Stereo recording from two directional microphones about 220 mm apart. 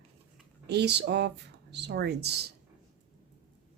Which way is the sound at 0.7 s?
50° right (ahead or behind).